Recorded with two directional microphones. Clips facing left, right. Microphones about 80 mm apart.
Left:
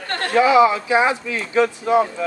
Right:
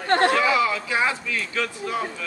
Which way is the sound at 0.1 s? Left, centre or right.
Right.